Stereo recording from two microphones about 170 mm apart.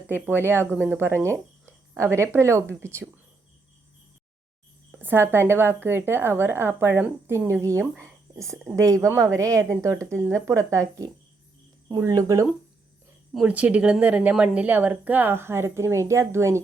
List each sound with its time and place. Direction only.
0.1 s a woman's voice: 10° right (ahead or behind)
4.9 s a woman's voice: 10° right (ahead or behind)
13.3 s a woman's voice: 5° right (ahead or behind)